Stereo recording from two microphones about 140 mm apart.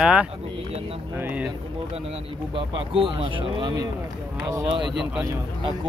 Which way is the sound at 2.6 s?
40° right (ahead or behind).